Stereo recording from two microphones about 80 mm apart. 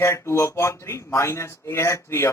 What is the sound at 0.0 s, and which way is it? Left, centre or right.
A man's voice, left.